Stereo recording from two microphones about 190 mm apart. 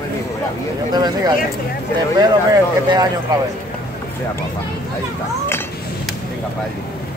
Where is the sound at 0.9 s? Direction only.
20° right (ahead or behind).